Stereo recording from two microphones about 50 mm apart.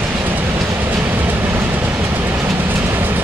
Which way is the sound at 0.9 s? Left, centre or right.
Right.